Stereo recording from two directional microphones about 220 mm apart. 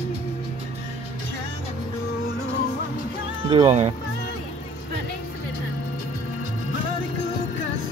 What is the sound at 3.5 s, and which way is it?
Speech, 25° right (ahead or behind).